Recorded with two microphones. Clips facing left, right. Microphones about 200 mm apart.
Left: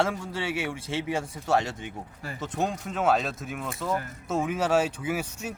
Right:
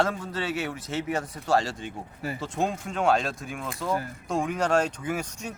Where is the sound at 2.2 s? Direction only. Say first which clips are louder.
Right 1 dB; 15° right (ahead or behind).